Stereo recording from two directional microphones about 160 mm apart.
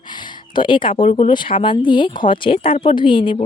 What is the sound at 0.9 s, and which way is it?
A woman's voice, 40° left (ahead or behind).